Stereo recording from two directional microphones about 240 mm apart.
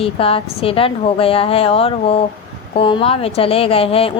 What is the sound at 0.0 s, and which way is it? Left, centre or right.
Speech, left.